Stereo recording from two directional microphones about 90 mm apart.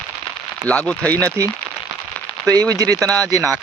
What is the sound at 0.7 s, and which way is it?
Speech, 15° left (ahead or behind).